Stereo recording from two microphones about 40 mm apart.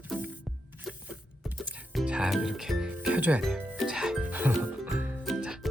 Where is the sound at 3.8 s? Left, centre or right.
Right.